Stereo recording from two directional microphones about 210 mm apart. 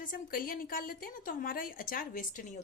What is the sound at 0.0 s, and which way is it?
A woman's voice, 40° left (ahead or behind).